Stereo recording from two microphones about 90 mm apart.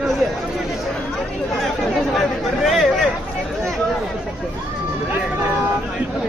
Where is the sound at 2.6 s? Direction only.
Centre (ahead or behind).